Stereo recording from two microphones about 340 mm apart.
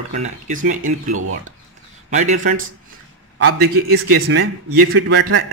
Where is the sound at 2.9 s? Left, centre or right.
Right.